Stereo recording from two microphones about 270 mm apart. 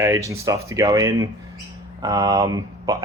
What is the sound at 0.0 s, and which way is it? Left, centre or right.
Speech, centre.